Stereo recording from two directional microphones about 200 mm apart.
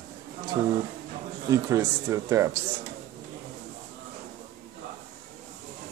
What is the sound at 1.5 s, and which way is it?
Speech, 15° right (ahead or behind).